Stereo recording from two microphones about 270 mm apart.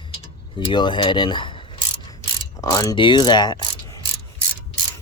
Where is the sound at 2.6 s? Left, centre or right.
Centre.